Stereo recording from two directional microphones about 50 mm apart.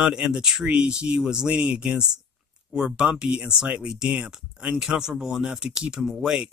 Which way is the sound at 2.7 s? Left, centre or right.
Centre.